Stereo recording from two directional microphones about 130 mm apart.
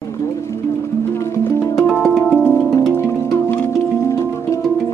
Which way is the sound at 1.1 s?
20° left (ahead or behind).